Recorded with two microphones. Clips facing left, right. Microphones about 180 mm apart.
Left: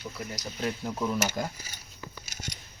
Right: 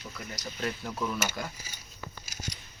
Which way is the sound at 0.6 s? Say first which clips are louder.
Left 3 dB; 15° left (ahead or behind).